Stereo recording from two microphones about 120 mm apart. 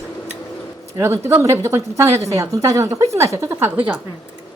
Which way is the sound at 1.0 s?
20° right (ahead or behind).